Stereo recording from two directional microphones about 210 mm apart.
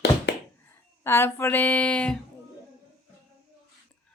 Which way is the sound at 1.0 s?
10° left (ahead or behind).